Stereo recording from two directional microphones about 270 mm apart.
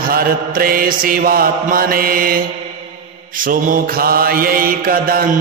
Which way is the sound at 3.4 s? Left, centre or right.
Right.